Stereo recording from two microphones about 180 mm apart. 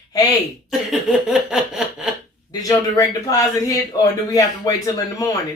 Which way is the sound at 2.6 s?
20° left (ahead or behind).